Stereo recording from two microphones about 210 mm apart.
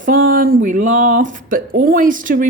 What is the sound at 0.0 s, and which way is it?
A woman's voice, 40° right (ahead or behind).